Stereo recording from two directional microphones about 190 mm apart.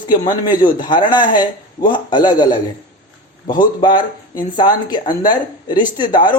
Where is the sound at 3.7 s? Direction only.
25° left (ahead or behind).